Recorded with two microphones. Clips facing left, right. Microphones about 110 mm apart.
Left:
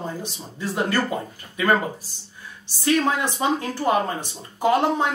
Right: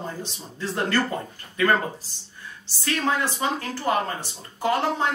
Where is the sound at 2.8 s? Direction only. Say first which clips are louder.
Left 4 dB; 15° left (ahead or behind).